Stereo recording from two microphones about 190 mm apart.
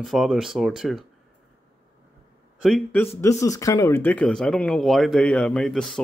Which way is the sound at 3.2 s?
15° left (ahead or behind).